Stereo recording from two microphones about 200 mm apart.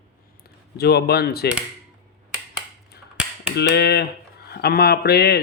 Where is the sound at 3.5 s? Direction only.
55° left (ahead or behind).